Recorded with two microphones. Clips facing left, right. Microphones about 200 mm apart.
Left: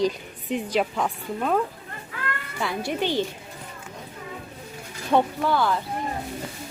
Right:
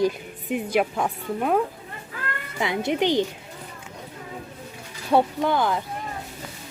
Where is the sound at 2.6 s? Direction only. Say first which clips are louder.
Right 4 dB; 20° right (ahead or behind).